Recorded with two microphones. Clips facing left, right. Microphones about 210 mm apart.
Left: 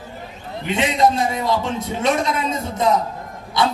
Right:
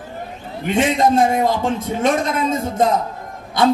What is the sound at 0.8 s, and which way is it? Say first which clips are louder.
A man's voice: right 3 dB; 50° right (ahead or behind).